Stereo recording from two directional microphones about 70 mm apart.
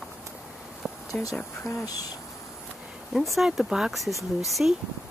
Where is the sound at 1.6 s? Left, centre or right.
Centre.